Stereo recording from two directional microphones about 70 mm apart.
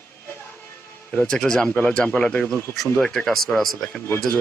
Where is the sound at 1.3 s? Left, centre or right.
Centre.